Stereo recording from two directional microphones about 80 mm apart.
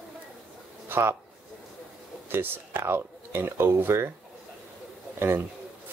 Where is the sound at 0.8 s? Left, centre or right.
Right.